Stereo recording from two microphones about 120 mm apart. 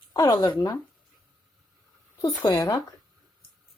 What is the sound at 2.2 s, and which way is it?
Speech, 30° left (ahead or behind).